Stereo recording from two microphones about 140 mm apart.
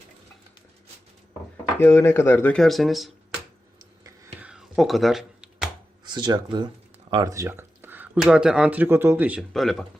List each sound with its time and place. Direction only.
1.8 s speech: 20° left (ahead or behind)
2.6 s speech: centre (ahead or behind)
4.4 s computer keyboard: 5° right (ahead or behind)
6.1 s speech: 30° right (ahead or behind); by 9.4 s 15° right (ahead or behind)
9.5 s speech: centre (ahead or behind)